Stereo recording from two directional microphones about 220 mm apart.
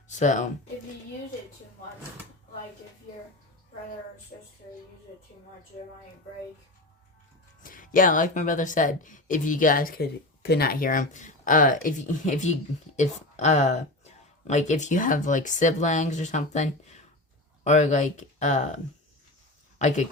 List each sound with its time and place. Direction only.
0.1 s speech: 35° left (ahead or behind)
7.6 s speech: 40° left (ahead or behind)
19.8 s speech: 30° left (ahead or behind)